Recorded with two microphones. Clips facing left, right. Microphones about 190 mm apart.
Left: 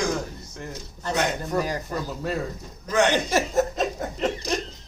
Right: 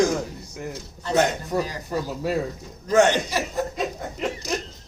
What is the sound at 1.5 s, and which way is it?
Speech, 10° right (ahead or behind).